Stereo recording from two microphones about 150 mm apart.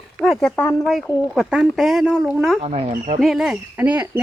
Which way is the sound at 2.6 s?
40° right (ahead or behind).